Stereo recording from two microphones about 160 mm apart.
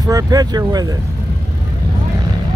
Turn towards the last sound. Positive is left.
turn(degrees=-25)  # may be behind; listen again after turning